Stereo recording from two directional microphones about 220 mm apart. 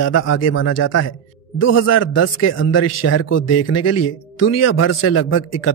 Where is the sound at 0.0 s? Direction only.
60° left (ahead or behind); by 4.0 s 90° left.